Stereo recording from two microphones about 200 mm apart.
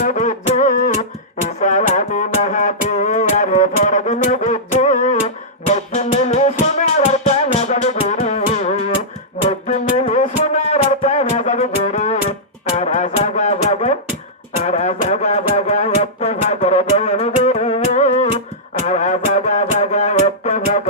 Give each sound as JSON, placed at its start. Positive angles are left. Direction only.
{"t": 0.0, "sound": "music", "side_deg": 35}